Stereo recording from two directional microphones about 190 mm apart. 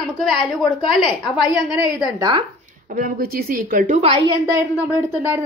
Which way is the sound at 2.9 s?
50° right (ahead or behind).